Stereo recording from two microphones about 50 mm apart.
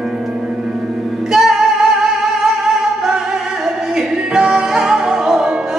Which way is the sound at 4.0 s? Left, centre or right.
Centre.